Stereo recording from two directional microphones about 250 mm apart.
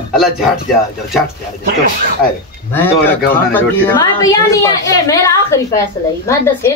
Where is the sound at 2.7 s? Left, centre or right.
Centre.